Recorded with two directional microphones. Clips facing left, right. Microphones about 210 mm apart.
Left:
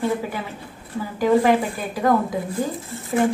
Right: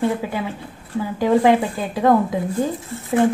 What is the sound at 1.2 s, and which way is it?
A woman's voice, 20° right (ahead or behind).